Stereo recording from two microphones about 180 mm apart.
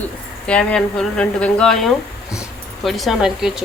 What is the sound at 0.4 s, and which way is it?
A woman's voice, 5° left (ahead or behind).